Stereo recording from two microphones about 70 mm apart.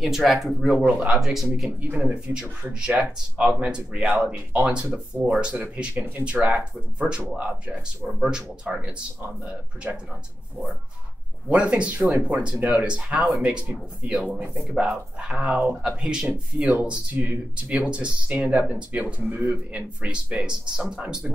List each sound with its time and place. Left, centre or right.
0.0 s speech: centre
1.8 s speech: right
2.9 s speech: centre
11.4 s speech: centre